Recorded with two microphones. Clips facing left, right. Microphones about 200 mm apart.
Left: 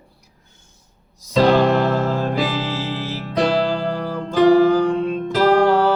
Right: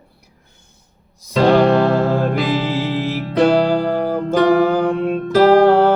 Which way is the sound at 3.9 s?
55° right (ahead or behind).